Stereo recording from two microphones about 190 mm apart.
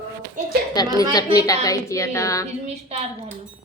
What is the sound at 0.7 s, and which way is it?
A woman's voice, 20° left (ahead or behind).